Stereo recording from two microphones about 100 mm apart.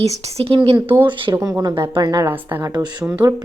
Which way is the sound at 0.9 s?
60° right (ahead or behind).